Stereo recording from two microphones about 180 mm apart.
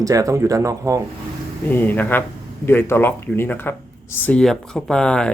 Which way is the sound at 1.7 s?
10° left (ahead or behind).